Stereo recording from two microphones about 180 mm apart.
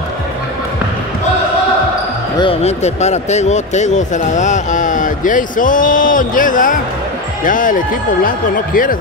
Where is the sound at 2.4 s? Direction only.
35° left (ahead or behind).